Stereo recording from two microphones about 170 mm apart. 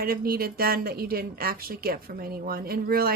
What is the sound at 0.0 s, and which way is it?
A woman's voice, 60° right (ahead or behind).